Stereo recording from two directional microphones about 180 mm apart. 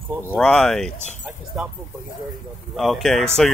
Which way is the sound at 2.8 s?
Centre (ahead or behind).